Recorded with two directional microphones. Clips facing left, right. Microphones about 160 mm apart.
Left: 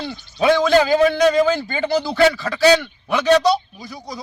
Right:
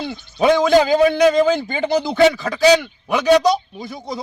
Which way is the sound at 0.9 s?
15° right (ahead or behind).